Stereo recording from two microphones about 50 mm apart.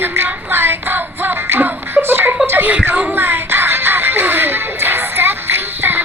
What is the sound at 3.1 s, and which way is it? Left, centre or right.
Music, right.